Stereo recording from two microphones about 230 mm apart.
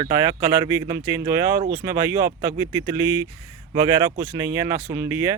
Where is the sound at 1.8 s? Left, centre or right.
Centre.